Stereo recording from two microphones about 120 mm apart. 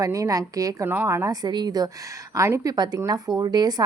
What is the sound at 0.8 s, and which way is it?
Speech, 20° right (ahead or behind).